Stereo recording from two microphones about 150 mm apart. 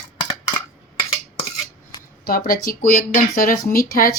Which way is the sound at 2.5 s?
75° left (ahead or behind).